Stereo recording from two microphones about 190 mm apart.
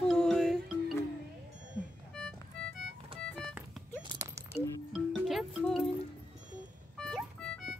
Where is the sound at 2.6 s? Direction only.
5° left (ahead or behind).